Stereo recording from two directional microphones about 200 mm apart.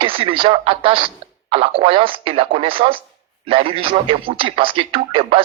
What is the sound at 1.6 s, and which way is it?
Speech, 30° right (ahead or behind).